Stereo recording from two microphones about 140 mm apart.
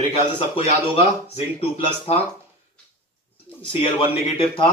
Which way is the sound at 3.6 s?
40° left (ahead or behind).